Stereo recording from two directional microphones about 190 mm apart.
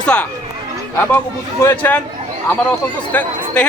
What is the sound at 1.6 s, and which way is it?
Speech, 10° left (ahead or behind).